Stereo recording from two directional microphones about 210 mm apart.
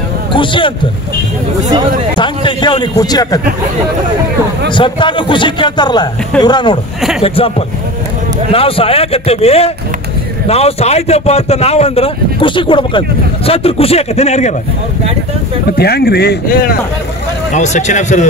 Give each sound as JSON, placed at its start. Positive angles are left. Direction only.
{"t": 0.3, "sound": "speech", "side_deg": 25}
{"t": 2.1, "sound": "a man's voice", "side_deg": 20}
{"t": 4.6, "sound": "speech", "side_deg": 25}
{"t": 15.8, "sound": "speech", "side_deg": 50}
{"t": 17.5, "sound": "speech", "side_deg": 35}